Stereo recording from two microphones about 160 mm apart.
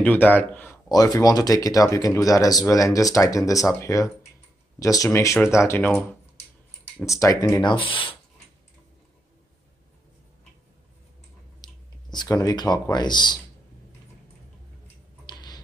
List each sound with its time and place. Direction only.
0.0 s speech: 10° left (ahead or behind)
0.8 s speech: 25° left (ahead or behind)
7.1 s speech: 20° left (ahead or behind)
11.6 s speech: 25° left (ahead or behind)
15.2 s a sound: 25° left (ahead or behind)